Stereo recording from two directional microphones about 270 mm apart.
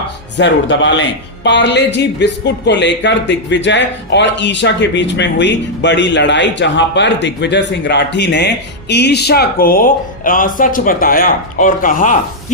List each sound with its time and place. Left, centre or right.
0.3 s speech: left